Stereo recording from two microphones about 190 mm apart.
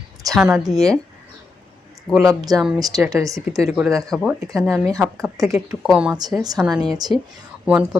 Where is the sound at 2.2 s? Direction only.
20° right (ahead or behind).